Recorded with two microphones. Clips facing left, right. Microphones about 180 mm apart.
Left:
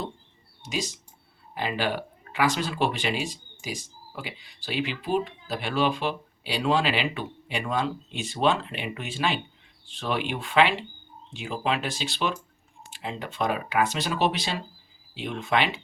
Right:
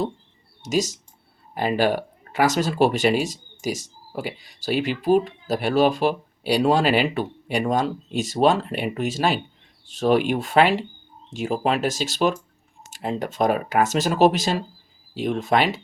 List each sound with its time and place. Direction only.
0.6 s speech: 45° right (ahead or behind)